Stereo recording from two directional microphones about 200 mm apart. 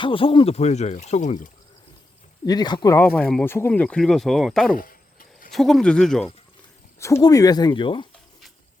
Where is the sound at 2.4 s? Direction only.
20° left (ahead or behind); by 4.7 s centre (ahead or behind).